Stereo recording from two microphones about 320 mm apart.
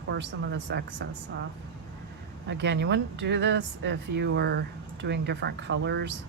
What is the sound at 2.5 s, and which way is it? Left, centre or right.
Speech, right.